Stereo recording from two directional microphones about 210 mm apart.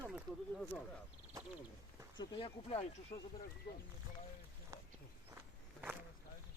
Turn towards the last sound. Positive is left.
turn(degrees=-15)  # may be behind; listen again after turning